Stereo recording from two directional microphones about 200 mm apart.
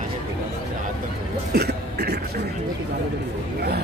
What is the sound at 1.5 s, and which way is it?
Throat clearing, 55° right (ahead or behind).